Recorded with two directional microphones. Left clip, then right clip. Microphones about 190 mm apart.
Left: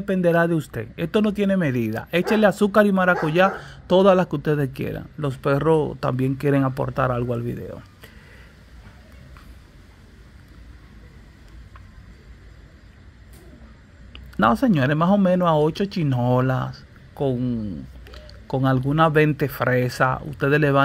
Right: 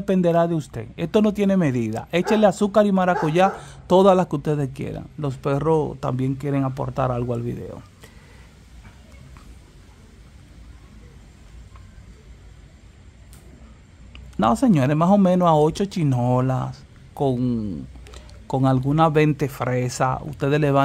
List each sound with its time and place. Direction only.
0.0 s speech: 20° right (ahead or behind)
0.3 s speech: 5° right (ahead or behind)
14.1 s speech: 5° right (ahead or behind)
17.1 s speech: 20° right (ahead or behind)
18.0 s speech: 10° right (ahead or behind)